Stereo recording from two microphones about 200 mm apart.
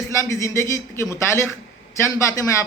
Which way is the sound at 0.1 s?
15° left (ahead or behind).